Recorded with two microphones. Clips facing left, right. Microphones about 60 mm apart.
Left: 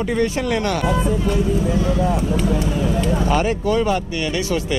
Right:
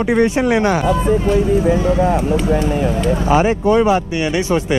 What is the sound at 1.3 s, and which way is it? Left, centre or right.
Speech, right.